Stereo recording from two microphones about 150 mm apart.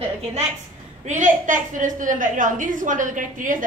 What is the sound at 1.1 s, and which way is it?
A woman's voice, 55° right (ahead or behind).